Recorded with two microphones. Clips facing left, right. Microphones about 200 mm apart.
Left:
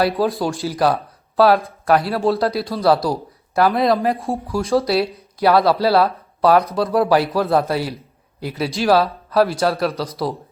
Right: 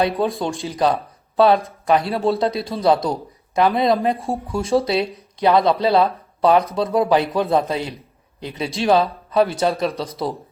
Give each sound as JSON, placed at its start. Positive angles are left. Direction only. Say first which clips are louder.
{"t": 0.0, "sound": "speech", "louder": "left 2 dB", "side_deg": 0}